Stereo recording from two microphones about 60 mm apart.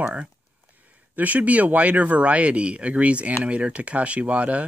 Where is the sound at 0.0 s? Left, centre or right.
Right.